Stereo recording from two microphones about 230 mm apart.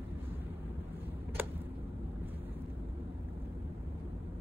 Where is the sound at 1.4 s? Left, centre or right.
Centre.